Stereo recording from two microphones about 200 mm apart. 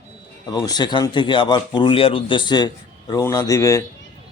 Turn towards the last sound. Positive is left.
turn(degrees=15)  # may be behind; listen again after turning